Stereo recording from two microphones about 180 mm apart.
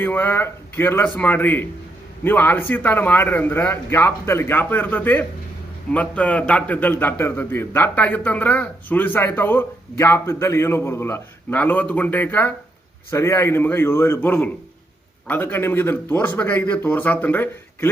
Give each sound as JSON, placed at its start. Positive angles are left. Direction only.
{"t": 0.0, "sound": "a man's voice", "side_deg": 10}